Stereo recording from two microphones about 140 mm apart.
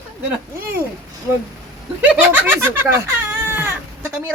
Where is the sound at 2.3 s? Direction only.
15° right (ahead or behind).